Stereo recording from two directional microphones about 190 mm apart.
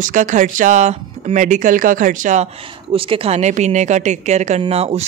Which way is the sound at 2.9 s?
30° right (ahead or behind).